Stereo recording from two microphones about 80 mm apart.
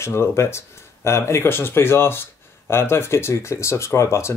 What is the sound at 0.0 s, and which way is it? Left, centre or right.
Speech, left.